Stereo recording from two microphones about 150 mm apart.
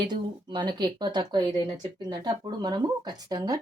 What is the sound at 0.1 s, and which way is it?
Speech, 30° right (ahead or behind).